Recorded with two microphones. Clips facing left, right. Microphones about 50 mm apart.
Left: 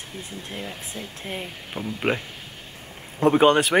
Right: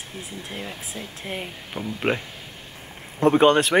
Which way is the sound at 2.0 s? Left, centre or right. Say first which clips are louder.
Even; centre.